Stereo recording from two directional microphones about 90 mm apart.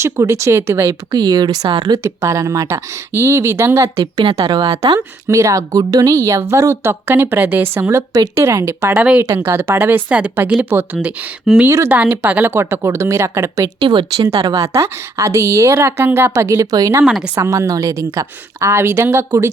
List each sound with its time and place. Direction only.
0.0 s speech: 35° right (ahead or behind)
1.1 s speech: 50° right (ahead or behind)
1.6 s speech: 60° right (ahead or behind)
2.0 s speech: 35° right (ahead or behind)
4.0 s a woman's voice: 75° right (ahead or behind)
4.6 s speech: 45° right (ahead or behind)
9.0 s speech: 15° right (ahead or behind)
9.2 s a woman's voice: 30° right (ahead or behind)
11.5 s a woman's voice: 5° right (ahead or behind)
11.9 s a woman's voice: 20° right (ahead or behind); by 13.7 s 35° right (ahead or behind)
13.7 s a woman's voice: 65° right (ahead or behind)
14.4 s speech: 35° right (ahead or behind)
17.1 s a woman's voice: 5° right (ahead or behind)
17.3 s speech: 30° right (ahead or behind)